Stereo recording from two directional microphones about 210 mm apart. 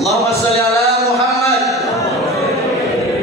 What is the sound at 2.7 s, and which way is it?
Chant, centre (ahead or behind).